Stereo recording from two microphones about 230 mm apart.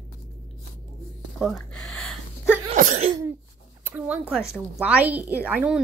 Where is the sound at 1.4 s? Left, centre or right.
Centre.